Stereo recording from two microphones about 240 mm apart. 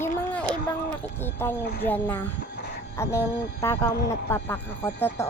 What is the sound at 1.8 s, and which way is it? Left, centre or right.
Speech, centre.